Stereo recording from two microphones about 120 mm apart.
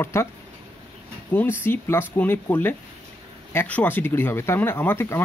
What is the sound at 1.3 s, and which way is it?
Speech, 20° left (ahead or behind).